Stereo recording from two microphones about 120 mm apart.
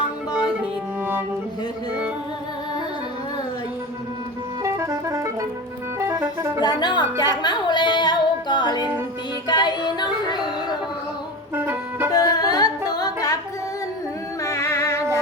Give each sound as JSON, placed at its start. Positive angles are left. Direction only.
{"t": 4.6, "sound": "music", "side_deg": -25}
{"t": 6.1, "sound": "speech", "side_deg": -20}
{"t": 6.7, "sound": "speech", "side_deg": 35}
{"t": 7.4, "sound": "music", "side_deg": 40}
{"t": 11.5, "sound": "music", "side_deg": -15}
{"t": 12.1, "sound": "music", "side_deg": 30}
{"t": 14.4, "sound": "music", "side_deg": 25}